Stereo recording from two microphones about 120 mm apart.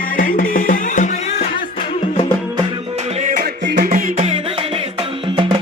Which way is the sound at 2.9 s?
70° right (ahead or behind).